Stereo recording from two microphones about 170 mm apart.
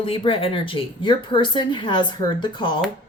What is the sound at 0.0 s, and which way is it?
A woman's voice, 30° left (ahead or behind).